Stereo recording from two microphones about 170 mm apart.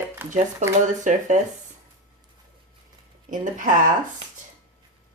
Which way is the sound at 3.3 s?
50° right (ahead or behind).